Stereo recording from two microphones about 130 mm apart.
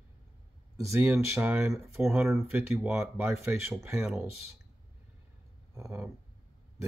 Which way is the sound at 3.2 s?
20° right (ahead or behind).